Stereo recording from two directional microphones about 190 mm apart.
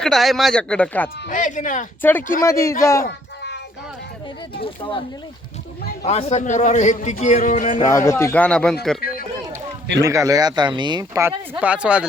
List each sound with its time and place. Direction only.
0.0 s speech: centre (ahead or behind)
1.3 s speech: 40° left (ahead or behind)
2.0 s speech: 10° left (ahead or behind)
3.0 s a sound: 65° left (ahead or behind)
4.6 s a man's voice: 25° left (ahead or behind)
7.9 s speech: 15° left (ahead or behind)
9.0 s run: 50° left (ahead or behind)
10.0 s speech: 15° right (ahead or behind)